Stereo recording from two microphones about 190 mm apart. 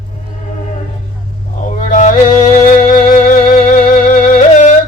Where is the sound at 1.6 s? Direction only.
40° left (ahead or behind).